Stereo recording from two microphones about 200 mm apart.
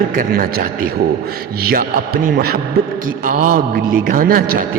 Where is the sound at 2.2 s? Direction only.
50° right (ahead or behind).